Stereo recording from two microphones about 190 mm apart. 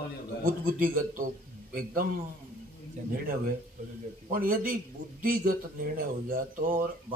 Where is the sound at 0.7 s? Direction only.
45° right (ahead or behind).